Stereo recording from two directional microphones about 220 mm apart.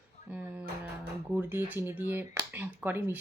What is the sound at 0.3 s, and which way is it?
Music, 5° right (ahead or behind).